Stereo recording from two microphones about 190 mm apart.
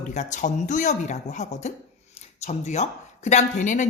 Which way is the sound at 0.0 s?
40° left (ahead or behind).